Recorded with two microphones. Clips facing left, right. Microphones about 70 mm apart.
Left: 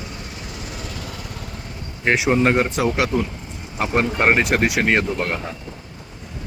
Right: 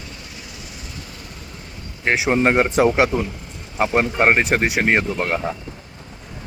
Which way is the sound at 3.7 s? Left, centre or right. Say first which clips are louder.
Right 2 dB; right.